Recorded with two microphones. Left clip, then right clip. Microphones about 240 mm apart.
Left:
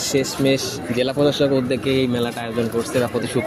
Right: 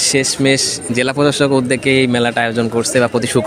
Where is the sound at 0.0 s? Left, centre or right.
Right.